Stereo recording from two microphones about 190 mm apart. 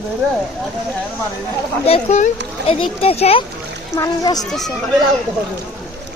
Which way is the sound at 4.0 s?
20° left (ahead or behind).